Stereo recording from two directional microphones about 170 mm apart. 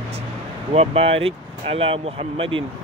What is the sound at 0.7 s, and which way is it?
Speech, 35° right (ahead or behind).